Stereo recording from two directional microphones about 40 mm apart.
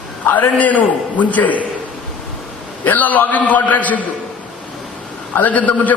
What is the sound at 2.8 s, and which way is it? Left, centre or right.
A man's voice, left.